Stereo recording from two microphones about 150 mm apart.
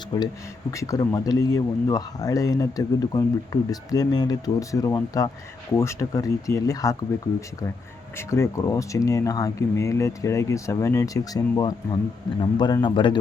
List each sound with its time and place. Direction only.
0.1 s speech: 30° left (ahead or behind)
0.7 s speech: 20° left (ahead or behind)
8.3 s speech: 20° left (ahead or behind)